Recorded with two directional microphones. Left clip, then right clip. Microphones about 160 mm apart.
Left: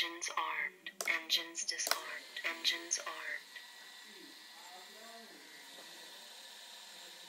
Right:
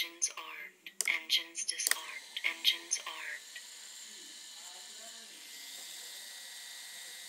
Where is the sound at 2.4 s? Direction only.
20° left (ahead or behind).